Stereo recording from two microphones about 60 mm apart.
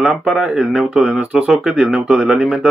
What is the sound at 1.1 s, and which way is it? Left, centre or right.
Speech, centre.